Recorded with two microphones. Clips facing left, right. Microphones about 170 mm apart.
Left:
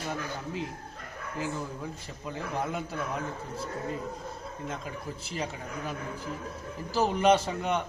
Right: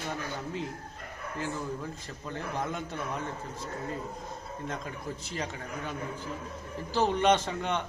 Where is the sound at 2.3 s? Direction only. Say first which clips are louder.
Left 1 dB; 5° left (ahead or behind).